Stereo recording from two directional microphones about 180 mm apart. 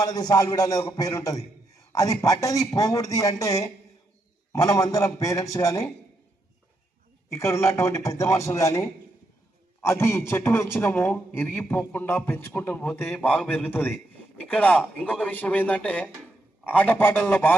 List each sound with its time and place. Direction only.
0.0 s a man's voice: 20° left (ahead or behind)
7.3 s a man's voice: 15° left (ahead or behind)